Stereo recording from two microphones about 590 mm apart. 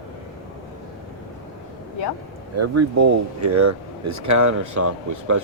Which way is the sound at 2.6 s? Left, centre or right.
Right.